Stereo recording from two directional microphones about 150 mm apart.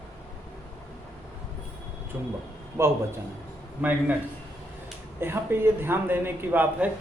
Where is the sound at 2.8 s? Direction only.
20° right (ahead or behind).